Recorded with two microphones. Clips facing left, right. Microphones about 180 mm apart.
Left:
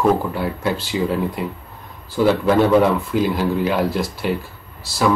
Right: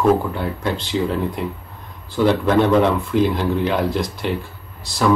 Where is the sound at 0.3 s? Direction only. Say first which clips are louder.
Left 1 dB; 5° left (ahead or behind).